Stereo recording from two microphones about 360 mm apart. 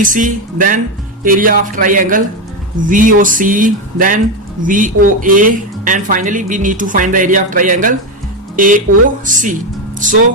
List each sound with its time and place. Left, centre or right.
0.0 s speech: right